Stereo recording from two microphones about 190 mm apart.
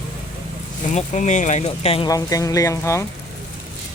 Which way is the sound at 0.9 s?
40° left (ahead or behind).